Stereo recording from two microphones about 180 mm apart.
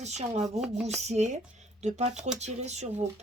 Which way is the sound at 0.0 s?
40° right (ahead or behind).